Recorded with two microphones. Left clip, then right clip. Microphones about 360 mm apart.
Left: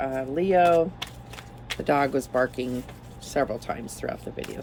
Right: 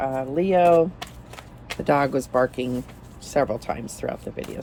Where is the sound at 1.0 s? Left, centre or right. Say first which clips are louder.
Left 1 dB; centre.